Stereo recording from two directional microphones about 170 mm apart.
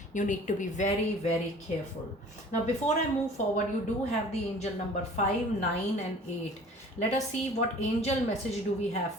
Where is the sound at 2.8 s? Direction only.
40° left (ahead or behind).